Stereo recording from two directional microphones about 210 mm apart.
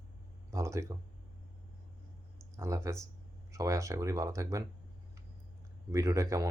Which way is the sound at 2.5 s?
15° right (ahead or behind).